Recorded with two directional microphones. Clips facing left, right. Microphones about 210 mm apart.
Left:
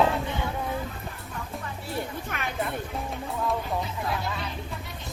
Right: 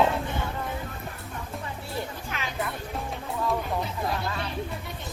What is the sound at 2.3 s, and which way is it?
Music, 55° left (ahead or behind).